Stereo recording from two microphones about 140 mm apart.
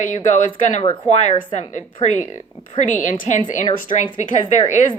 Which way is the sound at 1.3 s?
35° left (ahead or behind).